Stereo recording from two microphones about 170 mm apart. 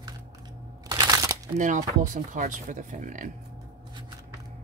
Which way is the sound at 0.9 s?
20° right (ahead or behind).